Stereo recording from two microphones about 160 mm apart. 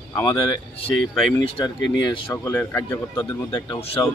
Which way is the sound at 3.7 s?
40° left (ahead or behind).